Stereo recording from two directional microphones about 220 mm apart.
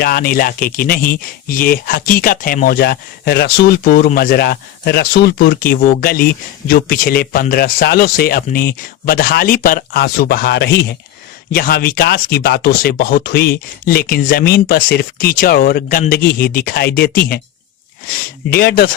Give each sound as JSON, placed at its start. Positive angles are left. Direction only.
{"t": 0.0, "sound": "speech", "side_deg": 40}
{"t": 18.5, "sound": "speech", "side_deg": 45}